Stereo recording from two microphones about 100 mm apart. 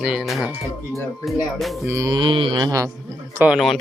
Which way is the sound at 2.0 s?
55° right (ahead or behind).